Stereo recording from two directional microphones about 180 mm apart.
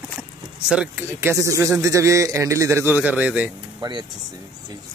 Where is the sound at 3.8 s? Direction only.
25° right (ahead or behind).